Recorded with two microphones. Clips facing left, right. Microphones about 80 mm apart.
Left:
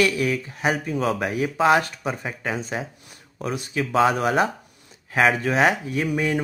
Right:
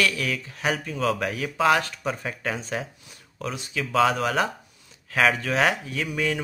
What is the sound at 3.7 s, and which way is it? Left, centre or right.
Speech, left.